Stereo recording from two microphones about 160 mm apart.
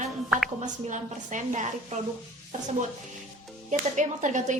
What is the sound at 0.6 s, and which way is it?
Music, 50° right (ahead or behind).